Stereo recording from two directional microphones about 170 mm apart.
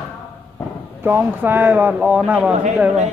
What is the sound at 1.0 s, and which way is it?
Speech, 10° right (ahead or behind).